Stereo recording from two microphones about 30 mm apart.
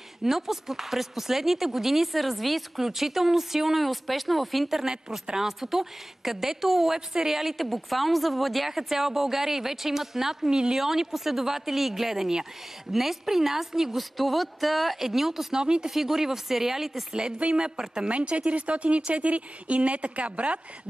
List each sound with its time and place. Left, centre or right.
0.2 s speech: centre
5.4 s speech: centre
8.6 s speech: centre
10.5 s a woman's voice: right
10.8 s speech: centre
14.1 s speech: centre
15.0 s speech: centre
15.5 s a woman's voice: right
15.9 s speech: centre
17.6 s a woman's voice: right
18.0 s speech: right